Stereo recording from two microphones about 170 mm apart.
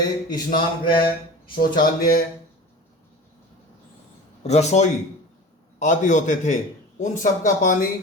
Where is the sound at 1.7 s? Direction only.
55° left (ahead or behind).